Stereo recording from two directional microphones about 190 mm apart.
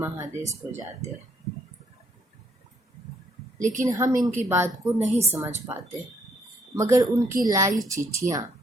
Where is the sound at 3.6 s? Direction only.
40° right (ahead or behind).